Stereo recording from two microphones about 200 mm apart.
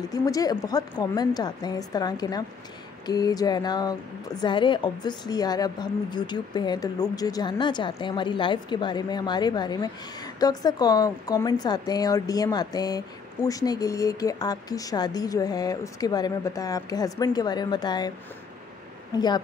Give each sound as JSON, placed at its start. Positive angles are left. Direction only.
{"t": 0.1, "sound": "a woman's voice", "side_deg": 20}
{"t": 19.1, "sound": "a woman's voice", "side_deg": 20}